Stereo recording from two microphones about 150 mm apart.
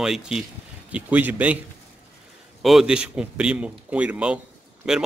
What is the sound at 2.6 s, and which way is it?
A man's voice, centre (ahead or behind).